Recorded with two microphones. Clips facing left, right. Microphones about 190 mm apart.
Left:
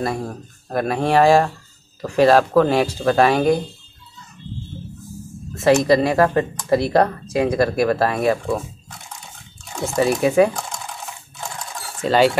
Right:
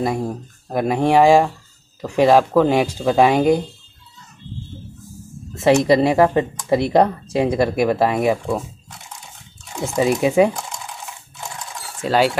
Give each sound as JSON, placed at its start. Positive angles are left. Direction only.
{"t": 0.0, "sound": "speech", "side_deg": -15}
{"t": 5.5, "sound": "speech", "side_deg": -20}
{"t": 9.9, "sound": "speech", "side_deg": -20}
{"t": 12.0, "sound": "speech", "side_deg": -5}